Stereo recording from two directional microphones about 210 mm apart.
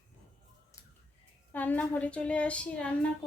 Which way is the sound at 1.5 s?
10° left (ahead or behind).